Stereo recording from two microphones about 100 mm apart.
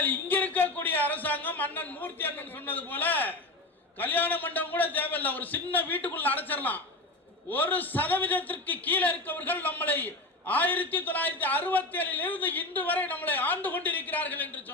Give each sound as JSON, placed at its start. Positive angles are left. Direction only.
{"t": 0.0, "sound": "a man's voice", "side_deg": 15}